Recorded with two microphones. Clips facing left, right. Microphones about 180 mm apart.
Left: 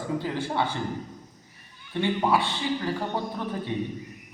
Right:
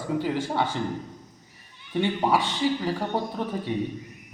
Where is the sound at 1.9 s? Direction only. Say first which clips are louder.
Right 1 dB; 15° right (ahead or behind).